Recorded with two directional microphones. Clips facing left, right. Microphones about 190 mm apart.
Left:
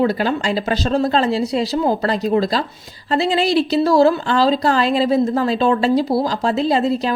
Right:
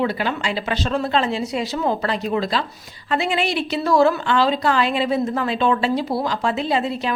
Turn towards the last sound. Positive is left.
turn(degrees=40)  # may be behind; listen again after turning